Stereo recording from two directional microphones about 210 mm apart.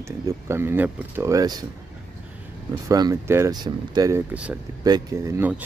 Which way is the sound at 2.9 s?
15° right (ahead or behind).